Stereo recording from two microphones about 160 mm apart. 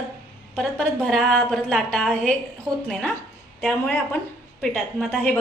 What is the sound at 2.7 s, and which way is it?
Speech, 25° right (ahead or behind).